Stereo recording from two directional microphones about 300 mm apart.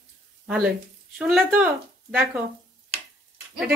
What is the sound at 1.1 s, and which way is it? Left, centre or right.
Speech, centre.